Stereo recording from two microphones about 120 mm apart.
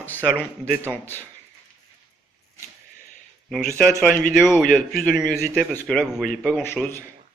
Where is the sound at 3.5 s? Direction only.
5° left (ahead or behind).